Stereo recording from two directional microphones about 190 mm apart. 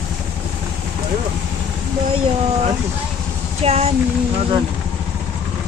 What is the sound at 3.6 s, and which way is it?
Speech, 35° right (ahead or behind).